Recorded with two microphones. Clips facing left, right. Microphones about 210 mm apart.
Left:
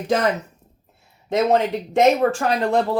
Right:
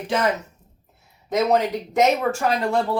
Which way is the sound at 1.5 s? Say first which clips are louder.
Left 1 dB; 25° left (ahead or behind).